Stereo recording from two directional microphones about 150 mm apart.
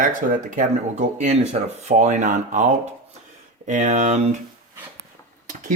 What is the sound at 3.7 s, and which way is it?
Speech, 50° right (ahead or behind).